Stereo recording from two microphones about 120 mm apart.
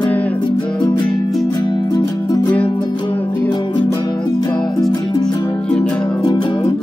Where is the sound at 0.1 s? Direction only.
10° left (ahead or behind).